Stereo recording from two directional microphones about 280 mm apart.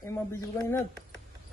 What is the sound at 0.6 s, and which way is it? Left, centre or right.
Speech, centre.